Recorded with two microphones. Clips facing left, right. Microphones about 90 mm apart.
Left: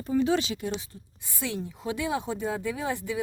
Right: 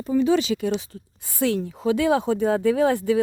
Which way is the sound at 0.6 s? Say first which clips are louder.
Right 8 dB; 90° right.